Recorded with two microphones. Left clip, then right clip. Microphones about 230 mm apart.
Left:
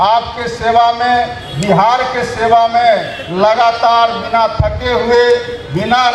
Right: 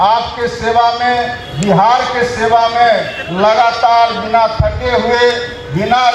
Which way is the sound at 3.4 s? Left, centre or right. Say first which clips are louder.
Even; left.